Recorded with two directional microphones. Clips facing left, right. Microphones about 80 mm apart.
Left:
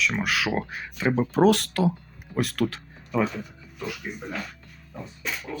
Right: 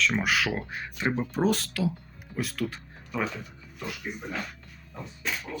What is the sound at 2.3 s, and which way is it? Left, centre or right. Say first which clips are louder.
Speech: left 6 dB; left.